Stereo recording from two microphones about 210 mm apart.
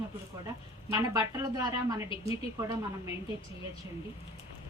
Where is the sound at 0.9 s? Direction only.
15° right (ahead or behind).